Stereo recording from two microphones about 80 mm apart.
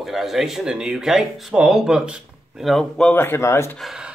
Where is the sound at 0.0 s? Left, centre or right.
Centre.